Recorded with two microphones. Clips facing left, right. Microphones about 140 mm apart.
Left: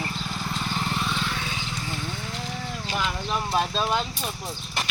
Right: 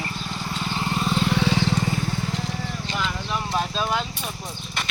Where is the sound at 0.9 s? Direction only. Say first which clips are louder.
Right 5 dB; 35° right (ahead or behind).